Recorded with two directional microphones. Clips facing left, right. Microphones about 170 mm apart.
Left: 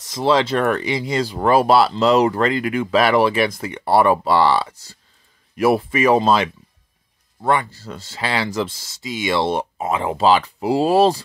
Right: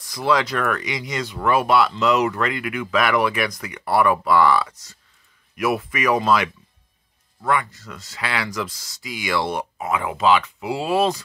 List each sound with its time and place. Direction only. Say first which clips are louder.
0.0 s speech: left 3 dB; 25° left (ahead or behind)